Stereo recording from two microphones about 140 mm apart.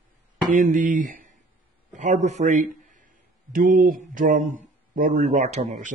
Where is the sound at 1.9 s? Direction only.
60° right (ahead or behind).